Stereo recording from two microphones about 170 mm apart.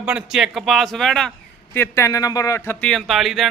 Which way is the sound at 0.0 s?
5° right (ahead or behind).